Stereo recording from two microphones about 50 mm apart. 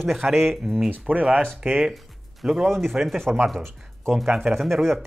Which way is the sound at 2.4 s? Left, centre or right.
Centre.